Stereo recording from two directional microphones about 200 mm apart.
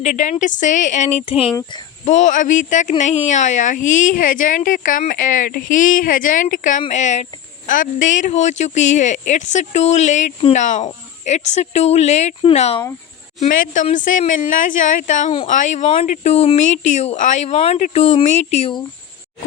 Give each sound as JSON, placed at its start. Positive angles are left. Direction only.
{"t": 0.0, "sound": "speech", "side_deg": 40}